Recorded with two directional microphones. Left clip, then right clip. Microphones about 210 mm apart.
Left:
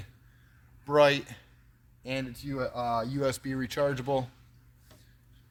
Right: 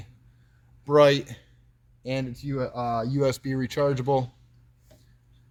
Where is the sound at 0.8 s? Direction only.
15° right (ahead or behind).